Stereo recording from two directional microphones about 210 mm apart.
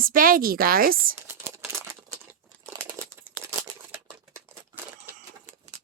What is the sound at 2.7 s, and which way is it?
Crumpling, 10° right (ahead or behind).